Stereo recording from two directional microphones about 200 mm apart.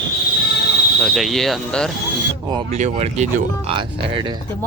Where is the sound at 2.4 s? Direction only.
25° right (ahead or behind).